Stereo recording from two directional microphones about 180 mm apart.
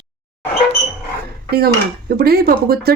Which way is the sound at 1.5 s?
60° right (ahead or behind).